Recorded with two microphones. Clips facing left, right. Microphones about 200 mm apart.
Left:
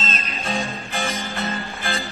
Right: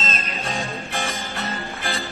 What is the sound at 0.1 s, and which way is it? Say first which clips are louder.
Music: left 1 dB; centre (ahead or behind).